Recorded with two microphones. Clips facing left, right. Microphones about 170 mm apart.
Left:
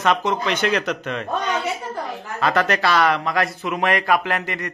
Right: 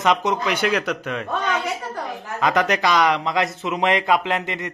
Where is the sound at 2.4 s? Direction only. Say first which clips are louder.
Even; 15° right (ahead or behind).